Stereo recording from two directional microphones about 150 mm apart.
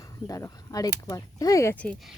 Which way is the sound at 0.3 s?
20° left (ahead or behind).